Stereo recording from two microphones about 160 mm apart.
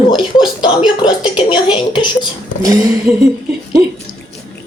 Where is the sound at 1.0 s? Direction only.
30° left (ahead or behind).